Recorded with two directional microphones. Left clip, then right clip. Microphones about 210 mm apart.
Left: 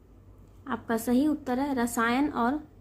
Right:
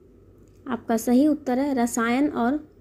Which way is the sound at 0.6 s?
20° right (ahead or behind).